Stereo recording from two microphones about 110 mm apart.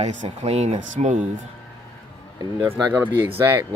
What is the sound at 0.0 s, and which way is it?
Speech, 90° right.